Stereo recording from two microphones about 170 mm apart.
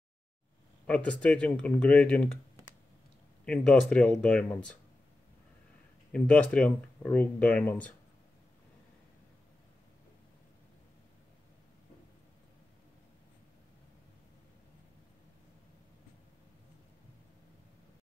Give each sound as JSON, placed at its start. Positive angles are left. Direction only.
{"t": 0.8, "sound": "speech", "side_deg": 5}
{"t": 3.4, "sound": "speech", "side_deg": 5}
{"t": 6.1, "sound": "speech", "side_deg": 5}